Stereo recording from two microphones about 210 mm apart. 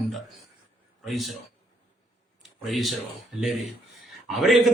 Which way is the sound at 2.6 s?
Centre (ahead or behind).